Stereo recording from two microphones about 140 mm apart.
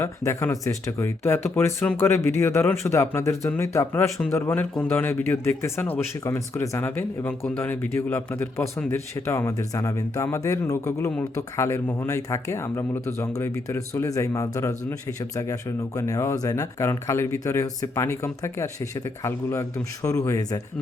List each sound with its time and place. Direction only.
0.0 s a man's voice: 20° left (ahead or behind)